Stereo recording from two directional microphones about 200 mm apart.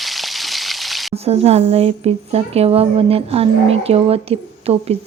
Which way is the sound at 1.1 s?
30° right (ahead or behind).